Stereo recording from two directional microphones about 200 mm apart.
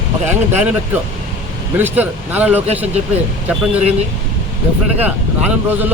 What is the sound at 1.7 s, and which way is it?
Speech, 10° right (ahead or behind).